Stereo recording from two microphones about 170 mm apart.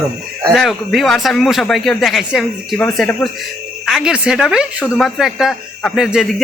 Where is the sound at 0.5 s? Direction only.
Centre (ahead or behind).